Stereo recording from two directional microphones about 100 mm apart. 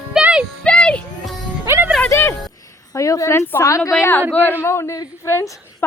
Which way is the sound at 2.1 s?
25° left (ahead or behind).